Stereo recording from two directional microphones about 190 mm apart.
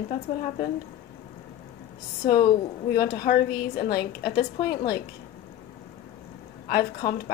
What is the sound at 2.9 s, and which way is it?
A woman's voice, 55° left (ahead or behind).